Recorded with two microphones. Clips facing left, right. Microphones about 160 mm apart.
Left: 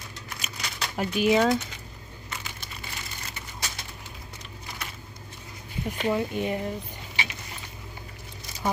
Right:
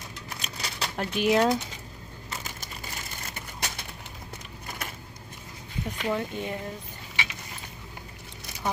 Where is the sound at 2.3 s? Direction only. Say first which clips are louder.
Right 1 dB; 40° right (ahead or behind).